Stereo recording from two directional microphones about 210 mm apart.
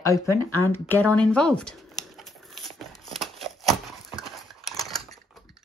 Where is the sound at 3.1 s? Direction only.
Centre (ahead or behind).